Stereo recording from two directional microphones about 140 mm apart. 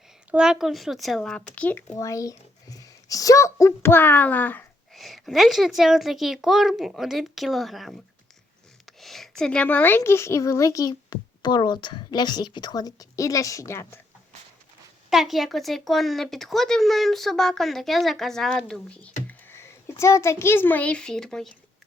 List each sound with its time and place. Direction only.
0.3 s speech: 5° right (ahead or behind); by 1.8 s 10° left (ahead or behind)
2.0 s a child's voice: 25° left (ahead or behind)
4.9 s a woman's voice: centre (ahead or behind); by 14.0 s 20° left (ahead or behind)
15.1 s a child's voice: centre (ahead or behind)